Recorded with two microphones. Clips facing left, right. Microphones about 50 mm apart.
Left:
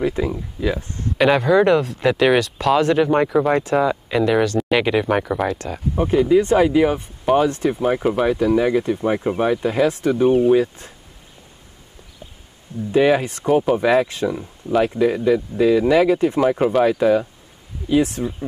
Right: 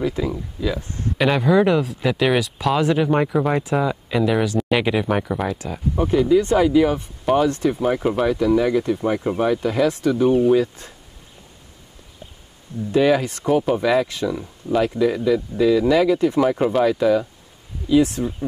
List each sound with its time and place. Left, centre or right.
0.0 s speech: left
1.1 s speech: centre
5.9 s speech: centre
7.7 s speech: centre
8.3 s speech: left
12.9 s speech: centre
14.3 s speech: centre
14.9 s speech: left
16.3 s speech: centre
16.8 s speech: left